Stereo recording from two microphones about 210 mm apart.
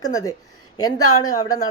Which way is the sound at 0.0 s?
15° left (ahead or behind).